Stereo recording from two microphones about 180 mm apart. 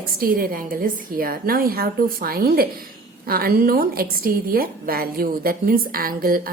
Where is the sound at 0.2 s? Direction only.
55° right (ahead or behind).